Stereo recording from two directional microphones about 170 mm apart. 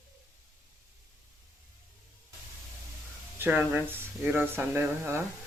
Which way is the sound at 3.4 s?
10° right (ahead or behind).